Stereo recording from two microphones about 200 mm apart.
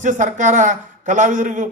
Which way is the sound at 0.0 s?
40° right (ahead or behind).